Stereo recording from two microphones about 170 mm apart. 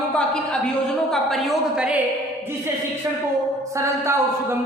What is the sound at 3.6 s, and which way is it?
Speech, 15° right (ahead or behind).